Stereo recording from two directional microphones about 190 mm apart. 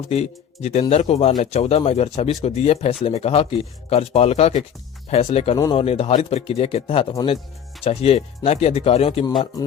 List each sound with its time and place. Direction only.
0.1 s a man's voice: 35° left (ahead or behind)
5.5 s speech: 20° left (ahead or behind)
5.8 s a man's voice: 30° left (ahead or behind)
7.9 s a man's voice: 30° left (ahead or behind)